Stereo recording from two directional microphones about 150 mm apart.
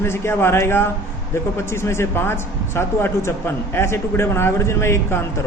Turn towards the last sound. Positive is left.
turn(degrees=15)  # may be behind; listen again after turning